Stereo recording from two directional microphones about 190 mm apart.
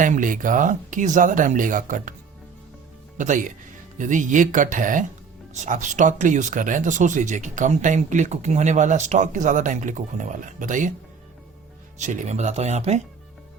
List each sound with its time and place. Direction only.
0.0 s speech: 45° right (ahead or behind)
3.2 s speech: 40° right (ahead or behind)
11.9 s speech: 40° right (ahead or behind)